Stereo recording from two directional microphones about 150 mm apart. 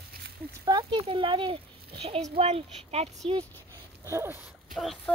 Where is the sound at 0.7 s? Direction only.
30° right (ahead or behind).